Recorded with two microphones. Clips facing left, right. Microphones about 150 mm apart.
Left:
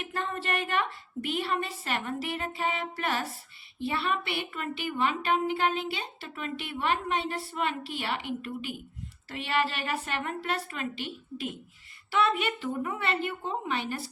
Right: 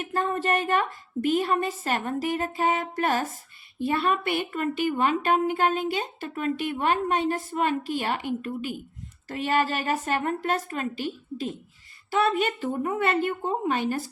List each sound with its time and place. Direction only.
0.0 s a woman's voice: 40° right (ahead or behind)